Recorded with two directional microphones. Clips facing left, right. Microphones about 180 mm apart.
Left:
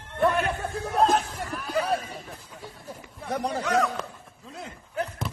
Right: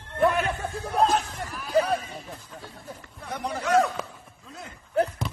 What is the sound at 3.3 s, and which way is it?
Speech, 40° left (ahead or behind).